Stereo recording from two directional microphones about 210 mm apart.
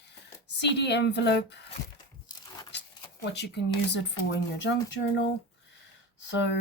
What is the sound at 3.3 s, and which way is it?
Speech, 55° left (ahead or behind).